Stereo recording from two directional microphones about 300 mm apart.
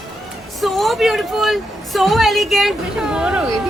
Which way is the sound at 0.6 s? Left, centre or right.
Centre.